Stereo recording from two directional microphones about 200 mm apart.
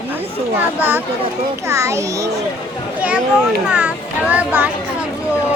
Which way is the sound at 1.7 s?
15° right (ahead or behind).